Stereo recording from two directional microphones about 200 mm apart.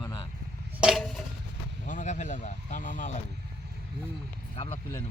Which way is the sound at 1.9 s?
40° left (ahead or behind).